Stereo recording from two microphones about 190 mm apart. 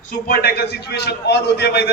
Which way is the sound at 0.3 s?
55° left (ahead or behind).